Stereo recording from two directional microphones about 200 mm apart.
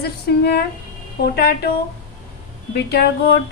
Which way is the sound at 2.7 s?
55° left (ahead or behind).